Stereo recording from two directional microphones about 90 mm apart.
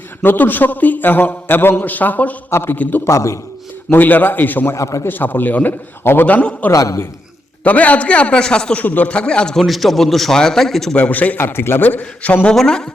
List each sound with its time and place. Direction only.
0.2 s a man's voice: 20° left (ahead or behind)
3.0 s a man's voice: 35° left (ahead or behind)
3.9 s a man's voice: 20° left (ahead or behind)
4.7 s a man's voice: 35° left (ahead or behind)
5.0 s a man's voice: 20° left (ahead or behind)
6.7 s a man's voice: 35° left (ahead or behind)
7.6 s a man's voice: 15° left (ahead or behind)
11.0 s a man's voice: 15° left (ahead or behind)